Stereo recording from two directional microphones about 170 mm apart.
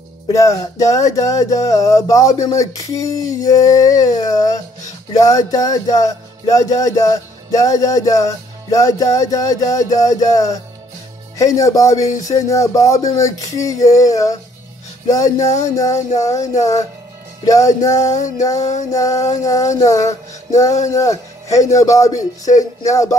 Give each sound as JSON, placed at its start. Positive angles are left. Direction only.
{"t": 0.3, "sound": "music", "side_deg": 20}
{"t": 18.6, "sound": "music", "side_deg": 40}
{"t": 18.9, "sound": "music", "side_deg": 20}